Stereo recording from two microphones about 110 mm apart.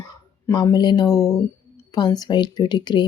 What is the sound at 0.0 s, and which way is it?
Speech, 35° left (ahead or behind).